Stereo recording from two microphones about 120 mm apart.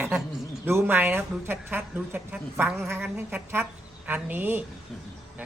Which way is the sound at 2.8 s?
20° right (ahead or behind).